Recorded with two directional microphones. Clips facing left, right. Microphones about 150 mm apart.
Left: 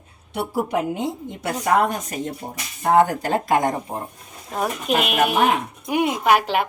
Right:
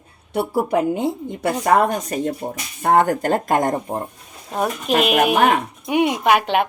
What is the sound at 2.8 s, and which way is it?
Speech, 55° right (ahead or behind).